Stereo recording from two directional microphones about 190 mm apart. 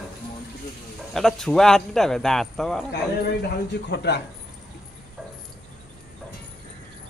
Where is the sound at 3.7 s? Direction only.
65° left (ahead or behind).